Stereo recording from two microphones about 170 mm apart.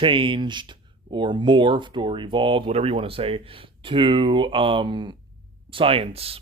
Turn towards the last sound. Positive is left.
turn(degrees=-35)  # may be behind; listen again after turning